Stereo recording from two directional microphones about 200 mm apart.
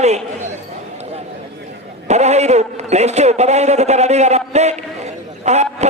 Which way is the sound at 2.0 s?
35° right (ahead or behind).